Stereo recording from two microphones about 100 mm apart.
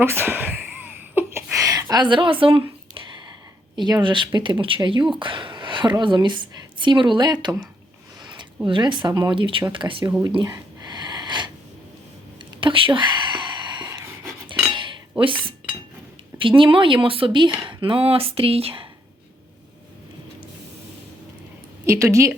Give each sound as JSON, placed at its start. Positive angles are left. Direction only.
{"t": 0.0, "sound": "a sound", "side_deg": -25}
{"t": 1.6, "sound": "speech", "side_deg": -35}
{"t": 3.8, "sound": "speech", "side_deg": -45}
{"t": 4.6, "sound": "a woman's voice", "side_deg": -60}
{"t": 8.6, "sound": "speech", "side_deg": -55}
{"t": 10.8, "sound": "a sound", "side_deg": -45}
{"t": 12.5, "sound": "a sound", "side_deg": -60}
{"t": 15.2, "sound": "speech", "side_deg": -60}
{"t": 21.8, "sound": "speech", "side_deg": -30}